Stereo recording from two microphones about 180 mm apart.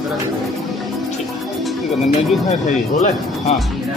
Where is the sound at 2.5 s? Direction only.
40° left (ahead or behind).